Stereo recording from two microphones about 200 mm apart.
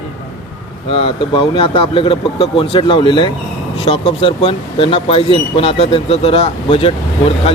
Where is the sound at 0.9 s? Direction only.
25° left (ahead or behind).